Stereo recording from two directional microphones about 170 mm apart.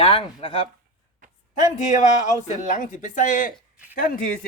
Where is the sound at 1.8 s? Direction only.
45° left (ahead or behind).